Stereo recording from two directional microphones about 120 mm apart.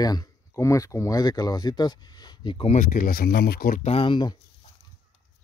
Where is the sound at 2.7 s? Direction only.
90° left.